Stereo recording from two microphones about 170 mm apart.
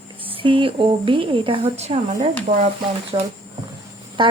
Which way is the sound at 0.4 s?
30° right (ahead or behind).